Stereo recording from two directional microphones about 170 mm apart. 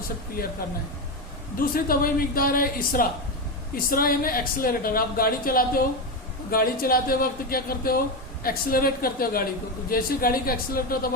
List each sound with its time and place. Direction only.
0.4 s speech: 60° left (ahead or behind)
1.5 s speech: 60° left (ahead or behind)